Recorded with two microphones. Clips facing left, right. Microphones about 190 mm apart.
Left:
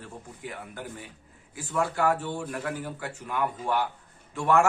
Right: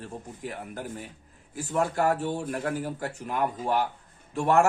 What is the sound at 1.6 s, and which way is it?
A man's voice, 40° right (ahead or behind).